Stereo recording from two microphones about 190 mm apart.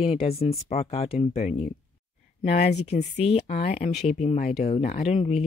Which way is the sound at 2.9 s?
35° left (ahead or behind).